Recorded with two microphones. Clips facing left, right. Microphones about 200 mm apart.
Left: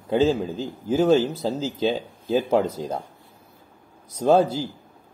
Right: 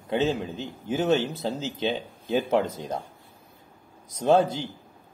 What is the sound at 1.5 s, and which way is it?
Speech, 30° left (ahead or behind).